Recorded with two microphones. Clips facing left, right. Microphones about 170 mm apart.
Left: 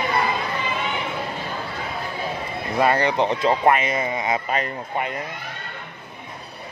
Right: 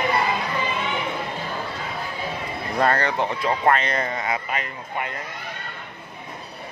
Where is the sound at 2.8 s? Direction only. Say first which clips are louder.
Left 2 dB; 10° left (ahead or behind).